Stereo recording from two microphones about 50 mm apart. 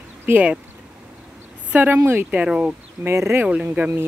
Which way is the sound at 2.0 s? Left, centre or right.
Right.